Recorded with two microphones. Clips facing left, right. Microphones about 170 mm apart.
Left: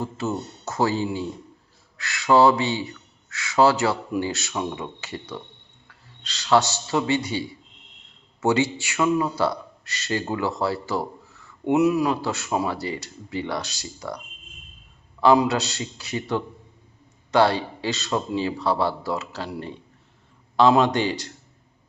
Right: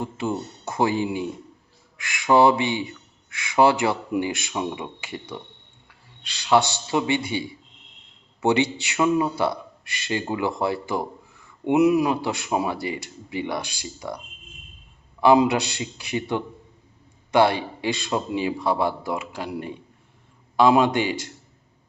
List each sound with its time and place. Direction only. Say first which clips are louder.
0.0 s a man's voice: even; 15° right (ahead or behind)
8.4 s a man's voice: even; 20° right (ahead or behind)
15.2 s a man's voice: right 1 dB; 15° right (ahead or behind)